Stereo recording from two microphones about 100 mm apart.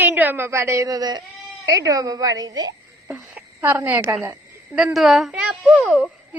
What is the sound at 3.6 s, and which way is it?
Speech, 20° right (ahead or behind).